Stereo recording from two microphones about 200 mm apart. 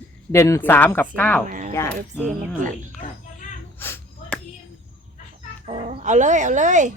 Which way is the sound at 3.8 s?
10° left (ahead or behind).